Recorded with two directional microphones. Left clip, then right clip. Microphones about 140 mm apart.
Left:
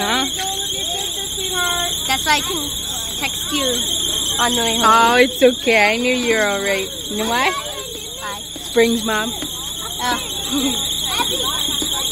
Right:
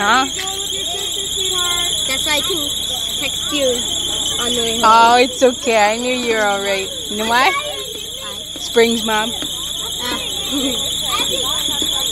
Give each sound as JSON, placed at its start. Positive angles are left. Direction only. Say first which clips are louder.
{"t": 0.0, "sound": "fire alarm", "louder": "right 5 dB", "side_deg": 10}
{"t": 2.0, "sound": "buzzer", "louder": "left 1 dB", "side_deg": 15}
{"t": 4.7, "sound": "speech", "louder": "right 3 dB", "side_deg": 25}
{"t": 7.2, "sound": "speech", "louder": "right 4 dB", "side_deg": 0}
{"t": 8.7, "sound": "speech", "louder": "right 2 dB", "side_deg": 5}